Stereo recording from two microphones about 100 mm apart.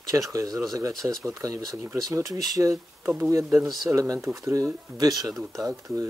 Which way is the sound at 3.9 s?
30° right (ahead or behind).